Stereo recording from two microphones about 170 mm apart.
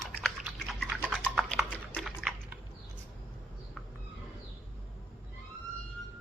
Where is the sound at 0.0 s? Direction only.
Centre (ahead or behind).